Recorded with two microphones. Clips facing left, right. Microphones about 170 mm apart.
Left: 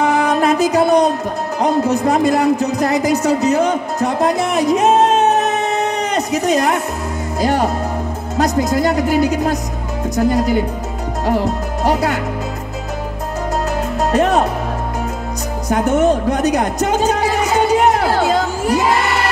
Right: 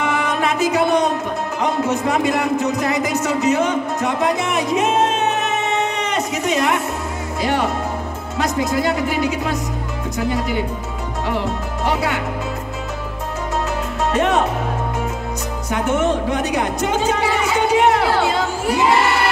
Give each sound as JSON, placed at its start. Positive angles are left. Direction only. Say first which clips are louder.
{"t": 0.0, "sound": "music", "louder": "left 5 dB", "side_deg": 40}
{"t": 1.6, "sound": "a woman's voice", "louder": "left 5 dB", "side_deg": 35}
{"t": 14.1, "sound": "a woman's voice", "louder": "left 3 dB", "side_deg": 40}
{"t": 15.7, "sound": "a woman's voice", "louder": "left 4 dB", "side_deg": 40}